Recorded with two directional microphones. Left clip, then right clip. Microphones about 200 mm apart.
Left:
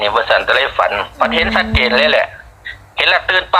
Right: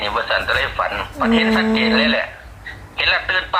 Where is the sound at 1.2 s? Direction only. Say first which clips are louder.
Left 2 dB; 45° left (ahead or behind).